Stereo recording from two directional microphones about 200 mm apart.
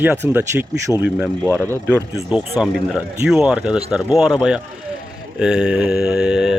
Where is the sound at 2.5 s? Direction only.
5° right (ahead or behind).